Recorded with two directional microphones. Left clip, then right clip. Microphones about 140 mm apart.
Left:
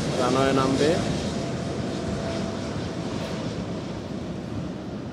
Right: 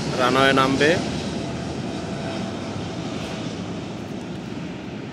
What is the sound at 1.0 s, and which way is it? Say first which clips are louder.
Vehicle: right 1 dB; 25° left (ahead or behind).